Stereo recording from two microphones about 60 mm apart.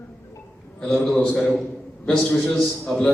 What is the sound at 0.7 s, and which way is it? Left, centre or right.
A man's voice, centre.